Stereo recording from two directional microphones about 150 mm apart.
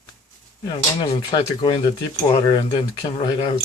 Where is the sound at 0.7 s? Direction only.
30° left (ahead or behind).